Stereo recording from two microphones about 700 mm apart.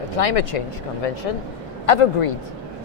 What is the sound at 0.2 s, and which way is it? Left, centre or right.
Speech, left.